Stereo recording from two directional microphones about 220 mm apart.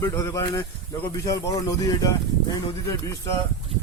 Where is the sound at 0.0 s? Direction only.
15° left (ahead or behind).